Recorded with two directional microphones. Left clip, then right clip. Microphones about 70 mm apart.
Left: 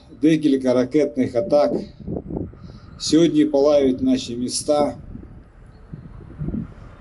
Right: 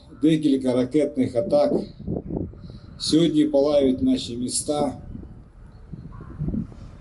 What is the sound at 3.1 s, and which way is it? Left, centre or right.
Speech, left.